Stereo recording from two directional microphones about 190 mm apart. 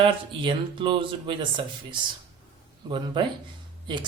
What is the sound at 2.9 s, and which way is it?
Speech, 25° right (ahead or behind).